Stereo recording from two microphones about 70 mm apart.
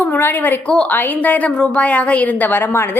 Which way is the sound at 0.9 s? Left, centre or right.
Left.